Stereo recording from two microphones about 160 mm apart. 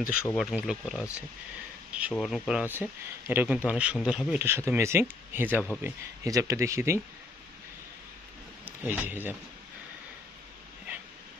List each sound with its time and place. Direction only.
0.3 s speech: centre (ahead or behind)
1.9 s a sound: 10° right (ahead or behind)
2.1 s speech: centre (ahead or behind)
8.6 s speech: 10° right (ahead or behind)